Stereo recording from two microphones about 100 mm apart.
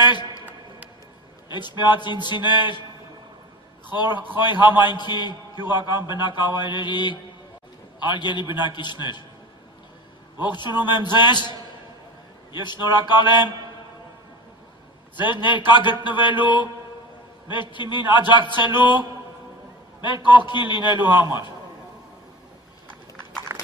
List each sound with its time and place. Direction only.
0.0 s a sound: 50° left (ahead or behind)
1.5 s a man's voice: 50° left (ahead or behind)
3.9 s a man's voice: 50° left (ahead or behind)
10.4 s a man's voice: 45° left (ahead or behind)
12.6 s a man's voice: 45° left (ahead or behind)
15.3 s a man's voice: 50° left (ahead or behind)
20.0 s a man's voice: 50° left (ahead or behind)
23.5 s clip-clop: 25° right (ahead or behind)